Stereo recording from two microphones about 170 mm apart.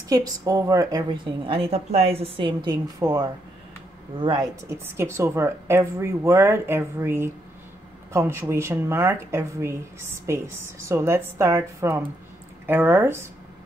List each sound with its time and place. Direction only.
0.1 s a woman's voice: 20° right (ahead or behind)
3.0 s a woman's voice: 20° right (ahead or behind)